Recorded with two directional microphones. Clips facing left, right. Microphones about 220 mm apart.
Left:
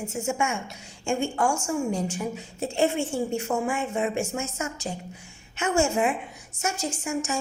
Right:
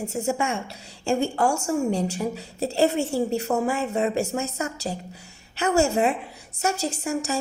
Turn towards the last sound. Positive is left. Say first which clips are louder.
# right 2 dB
turn(degrees=-35)  # may be behind; listen again after turning